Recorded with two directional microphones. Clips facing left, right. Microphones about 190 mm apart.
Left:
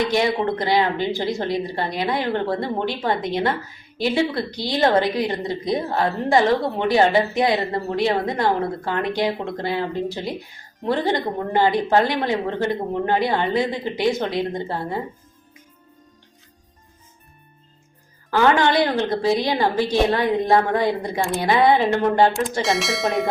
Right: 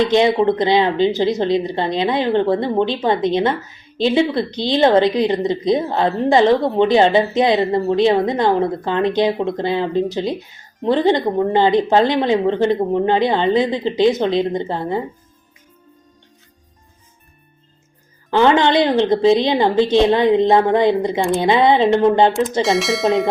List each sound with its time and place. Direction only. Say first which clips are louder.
0.0 s speech: right 6 dB; 20° right (ahead or behind)
18.3 s speech: right 4 dB; 20° right (ahead or behind)
22.6 s speech: right 5 dB; centre (ahead or behind)